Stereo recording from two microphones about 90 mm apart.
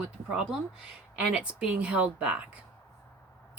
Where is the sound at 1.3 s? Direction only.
10° right (ahead or behind).